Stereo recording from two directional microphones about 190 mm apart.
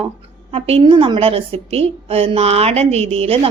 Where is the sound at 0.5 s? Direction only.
30° right (ahead or behind).